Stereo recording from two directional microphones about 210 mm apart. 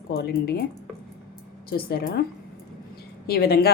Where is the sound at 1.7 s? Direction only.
50° left (ahead or behind).